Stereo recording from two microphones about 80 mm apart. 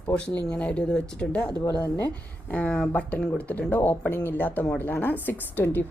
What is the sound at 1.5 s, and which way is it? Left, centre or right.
Speech, left.